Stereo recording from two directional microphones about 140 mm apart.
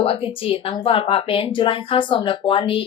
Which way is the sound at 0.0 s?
40° left (ahead or behind).